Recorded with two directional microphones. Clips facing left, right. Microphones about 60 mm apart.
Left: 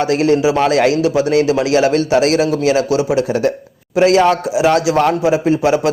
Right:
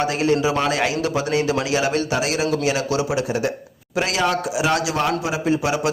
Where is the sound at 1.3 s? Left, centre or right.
Left.